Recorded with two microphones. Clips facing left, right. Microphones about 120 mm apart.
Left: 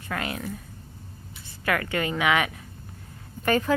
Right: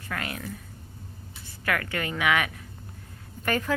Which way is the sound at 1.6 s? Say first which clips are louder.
Left 3 dB; 25° left (ahead or behind).